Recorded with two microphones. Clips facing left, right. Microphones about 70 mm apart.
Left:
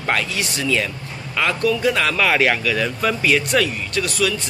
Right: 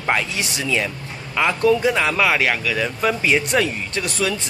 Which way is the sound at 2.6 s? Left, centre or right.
Centre.